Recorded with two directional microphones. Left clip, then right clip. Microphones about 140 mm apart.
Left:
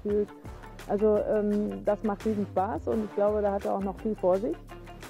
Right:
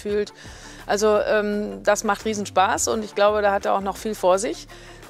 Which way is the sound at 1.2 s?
35° left (ahead or behind).